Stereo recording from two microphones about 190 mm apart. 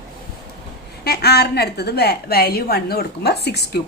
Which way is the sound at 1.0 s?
60° left (ahead or behind).